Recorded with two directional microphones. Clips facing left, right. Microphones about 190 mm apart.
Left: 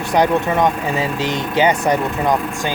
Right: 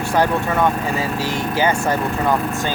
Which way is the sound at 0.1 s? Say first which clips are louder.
Left 3 dB; 15° left (ahead or behind).